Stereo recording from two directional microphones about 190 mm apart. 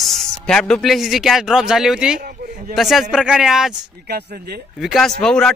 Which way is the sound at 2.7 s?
Centre (ahead or behind).